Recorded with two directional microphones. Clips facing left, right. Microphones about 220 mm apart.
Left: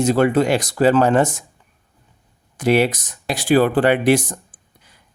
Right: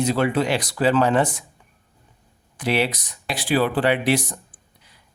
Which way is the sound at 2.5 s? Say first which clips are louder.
Left 6 dB; 45° left (ahead or behind).